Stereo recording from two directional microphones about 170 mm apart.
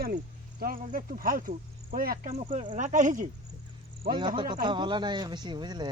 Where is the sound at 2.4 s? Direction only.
30° right (ahead or behind).